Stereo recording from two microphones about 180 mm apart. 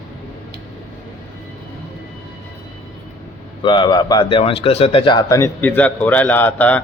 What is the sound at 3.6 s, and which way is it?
Speech, 25° left (ahead or behind).